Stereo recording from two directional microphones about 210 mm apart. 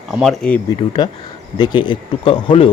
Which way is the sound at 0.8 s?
20° left (ahead or behind).